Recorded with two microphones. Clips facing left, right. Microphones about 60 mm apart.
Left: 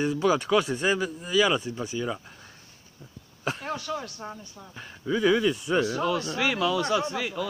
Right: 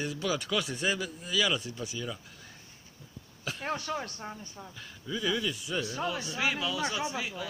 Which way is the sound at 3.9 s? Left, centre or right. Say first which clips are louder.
Left 4 dB; centre.